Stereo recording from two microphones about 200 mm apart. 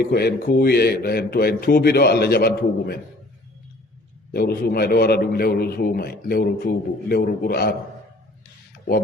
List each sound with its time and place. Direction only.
0.0 s a man's voice: 55° left (ahead or behind)
4.3 s a man's voice: 50° left (ahead or behind)